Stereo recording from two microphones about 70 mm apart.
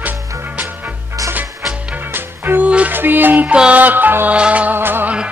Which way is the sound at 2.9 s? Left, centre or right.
Right.